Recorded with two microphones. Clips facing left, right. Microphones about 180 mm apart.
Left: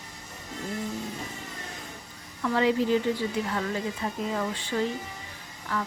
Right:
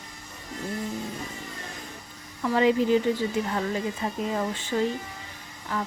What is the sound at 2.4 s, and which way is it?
Speech, 15° right (ahead or behind).